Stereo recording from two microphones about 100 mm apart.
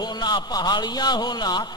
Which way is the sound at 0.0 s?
45° left (ahead or behind).